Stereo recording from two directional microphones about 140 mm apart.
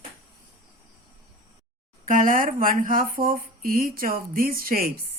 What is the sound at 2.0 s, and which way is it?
Speech, 75° right (ahead or behind).